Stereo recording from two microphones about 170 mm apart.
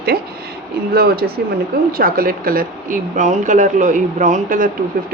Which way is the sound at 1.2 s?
70° right (ahead or behind).